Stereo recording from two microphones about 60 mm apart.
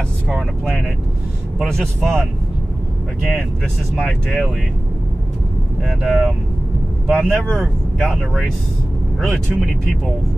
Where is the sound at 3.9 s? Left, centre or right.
Centre.